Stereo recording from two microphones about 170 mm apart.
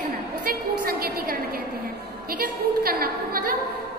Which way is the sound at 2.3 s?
60° right (ahead or behind).